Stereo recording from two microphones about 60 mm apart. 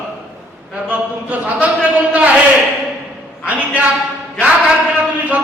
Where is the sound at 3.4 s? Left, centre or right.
Right.